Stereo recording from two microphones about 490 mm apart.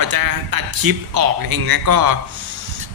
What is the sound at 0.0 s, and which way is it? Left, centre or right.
A man's voice, right.